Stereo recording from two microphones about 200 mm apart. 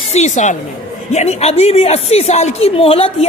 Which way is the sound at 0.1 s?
35° left (ahead or behind).